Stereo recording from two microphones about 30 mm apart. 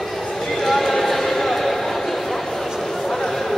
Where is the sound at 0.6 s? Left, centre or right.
Centre.